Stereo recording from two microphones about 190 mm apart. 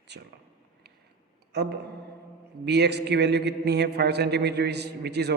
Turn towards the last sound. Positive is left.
turn(degrees=-60)  # may be behind; listen again after turning